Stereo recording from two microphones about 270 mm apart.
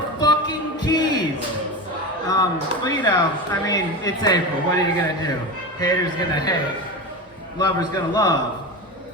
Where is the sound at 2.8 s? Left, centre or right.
Centre.